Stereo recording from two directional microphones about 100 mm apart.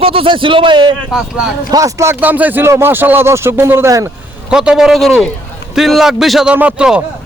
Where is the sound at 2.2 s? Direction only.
15° right (ahead or behind).